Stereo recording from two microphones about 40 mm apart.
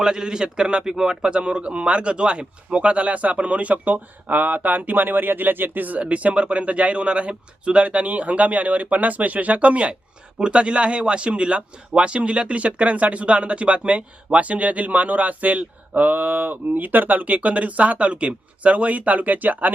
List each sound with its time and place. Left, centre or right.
0.0 s a man's voice: centre; by 19.7 s right